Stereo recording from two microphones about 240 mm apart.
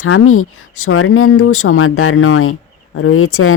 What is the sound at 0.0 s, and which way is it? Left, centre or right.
Speech, left.